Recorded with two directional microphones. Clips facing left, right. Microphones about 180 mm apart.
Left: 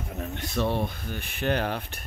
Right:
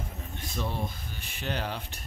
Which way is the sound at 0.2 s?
70° left (ahead or behind).